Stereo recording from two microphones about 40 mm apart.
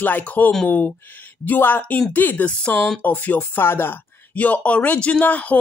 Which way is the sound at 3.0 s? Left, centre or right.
Left.